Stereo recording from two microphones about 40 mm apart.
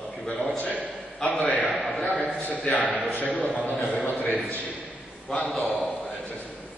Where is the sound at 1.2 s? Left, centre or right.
Left.